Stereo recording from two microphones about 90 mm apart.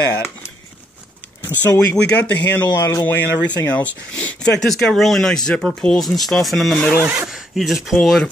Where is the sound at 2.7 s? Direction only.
35° left (ahead or behind).